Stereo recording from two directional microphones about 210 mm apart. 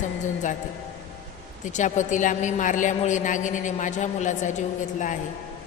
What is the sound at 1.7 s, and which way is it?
A woman's voice, 35° left (ahead or behind).